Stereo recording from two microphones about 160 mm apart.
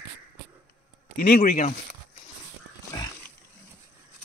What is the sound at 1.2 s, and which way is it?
Speech, 60° left (ahead or behind).